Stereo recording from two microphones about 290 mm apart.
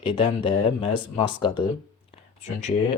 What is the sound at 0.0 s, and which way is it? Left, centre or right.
Speech, centre.